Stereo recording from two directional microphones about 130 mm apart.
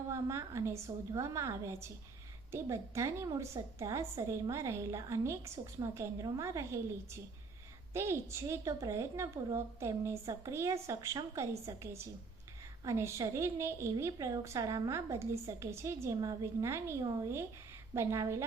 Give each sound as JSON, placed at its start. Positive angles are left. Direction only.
{"t": 0.1, "sound": "a woman's voice", "side_deg": -25}
{"t": 7.9, "sound": "a woman's voice", "side_deg": -20}